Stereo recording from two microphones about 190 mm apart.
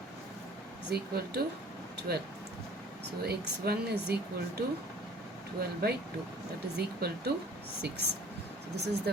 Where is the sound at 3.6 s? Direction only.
55° right (ahead or behind).